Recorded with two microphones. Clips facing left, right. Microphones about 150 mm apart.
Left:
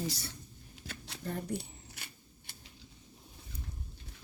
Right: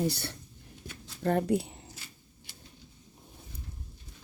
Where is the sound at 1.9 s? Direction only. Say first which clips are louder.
Right 1 dB; 65° left (ahead or behind).